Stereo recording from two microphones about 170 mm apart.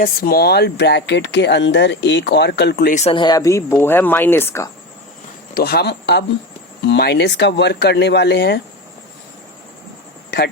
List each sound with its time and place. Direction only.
0.0 s speech: 60° left (ahead or behind)
2.9 s speech: 35° left (ahead or behind); by 4.7 s 15° left (ahead or behind)
5.5 s speech: 65° left (ahead or behind)